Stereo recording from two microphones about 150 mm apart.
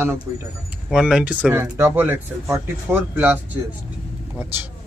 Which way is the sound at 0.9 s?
5° right (ahead or behind).